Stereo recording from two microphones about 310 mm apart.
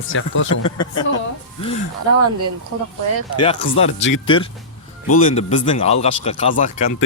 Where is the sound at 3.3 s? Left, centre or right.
Centre.